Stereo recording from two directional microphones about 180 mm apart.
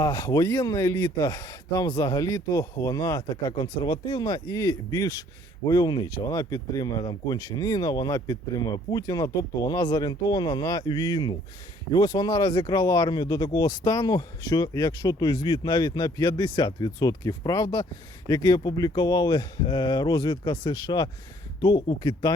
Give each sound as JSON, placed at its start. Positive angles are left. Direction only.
{"t": 0.0, "sound": "speech", "side_deg": 25}